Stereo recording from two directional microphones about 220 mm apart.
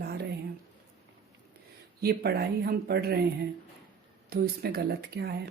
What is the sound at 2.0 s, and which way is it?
Speech, 45° right (ahead or behind).